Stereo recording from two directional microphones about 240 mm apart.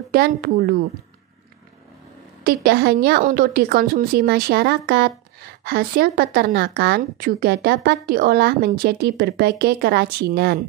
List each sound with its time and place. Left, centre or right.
0.1 s a woman's voice: right
2.4 s a woman's voice: right